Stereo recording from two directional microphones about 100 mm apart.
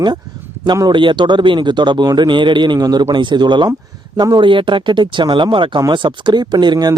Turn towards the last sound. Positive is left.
turn(degrees=-45)  # may be behind; listen again after turning